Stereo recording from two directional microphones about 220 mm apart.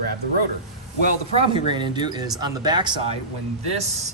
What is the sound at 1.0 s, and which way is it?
Speech, 25° right (ahead or behind).